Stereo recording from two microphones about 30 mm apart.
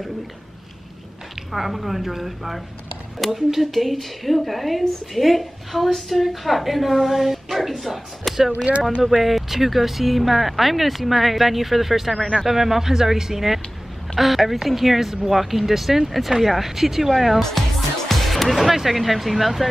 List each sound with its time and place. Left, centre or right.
1.3 s speech: centre
9.0 s speech: centre
12.2 s speech: left
12.4 s speech: centre
17.4 s speech: centre